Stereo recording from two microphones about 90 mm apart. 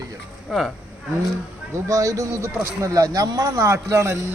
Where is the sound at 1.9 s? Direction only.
40° right (ahead or behind).